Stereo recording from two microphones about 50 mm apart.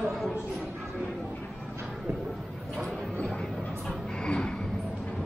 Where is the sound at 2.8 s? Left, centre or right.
Centre.